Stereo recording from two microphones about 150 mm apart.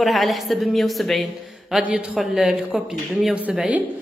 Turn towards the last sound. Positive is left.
turn(degrees=-5)  # may be behind; listen again after turning